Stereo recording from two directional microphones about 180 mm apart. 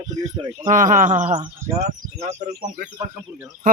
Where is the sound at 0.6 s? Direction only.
45° right (ahead or behind).